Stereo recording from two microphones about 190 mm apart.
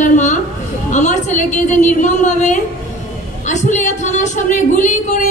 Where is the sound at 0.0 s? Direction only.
40° left (ahead or behind).